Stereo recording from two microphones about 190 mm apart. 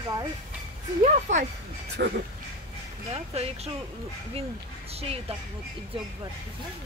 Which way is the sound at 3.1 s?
35° right (ahead or behind).